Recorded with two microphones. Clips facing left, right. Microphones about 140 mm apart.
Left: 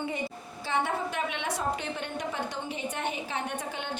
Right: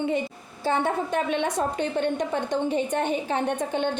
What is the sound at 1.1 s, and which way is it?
Speech, 40° right (ahead or behind).